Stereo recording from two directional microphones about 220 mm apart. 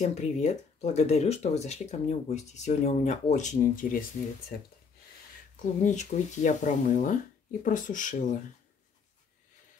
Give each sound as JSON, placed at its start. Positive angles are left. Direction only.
{"t": 0.0, "sound": "speech", "side_deg": 30}
{"t": 5.8, "sound": "speech", "side_deg": 35}